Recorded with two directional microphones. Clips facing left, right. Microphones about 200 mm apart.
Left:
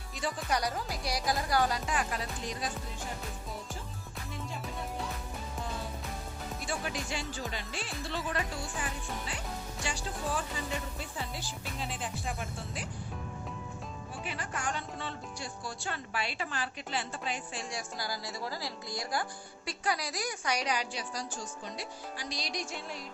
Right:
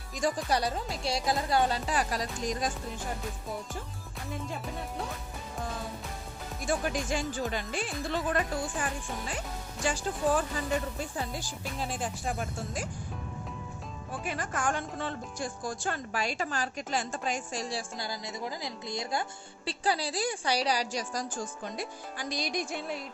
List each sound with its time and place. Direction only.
0.2 s speech: 40° right (ahead or behind)
6.7 s a woman's voice: 50° right (ahead or behind)
14.3 s a woman's voice: 50° right (ahead or behind)